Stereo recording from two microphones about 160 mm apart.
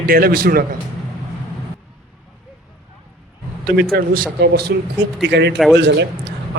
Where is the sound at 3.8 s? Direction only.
65° right (ahead or behind).